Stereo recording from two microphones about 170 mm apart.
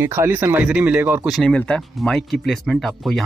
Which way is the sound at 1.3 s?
5° left (ahead or behind).